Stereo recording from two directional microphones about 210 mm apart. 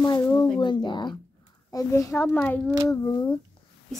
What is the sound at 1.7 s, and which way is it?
A child's voice, 15° left (ahead or behind).